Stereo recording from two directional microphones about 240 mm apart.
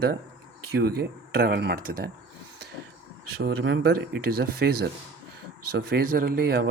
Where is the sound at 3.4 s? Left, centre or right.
Right.